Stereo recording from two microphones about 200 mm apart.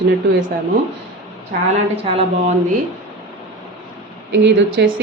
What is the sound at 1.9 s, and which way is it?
Speech, 30° right (ahead or behind).